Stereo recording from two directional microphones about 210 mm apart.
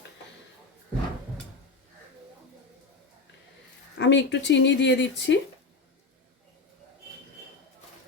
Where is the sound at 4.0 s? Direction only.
55° left (ahead or behind).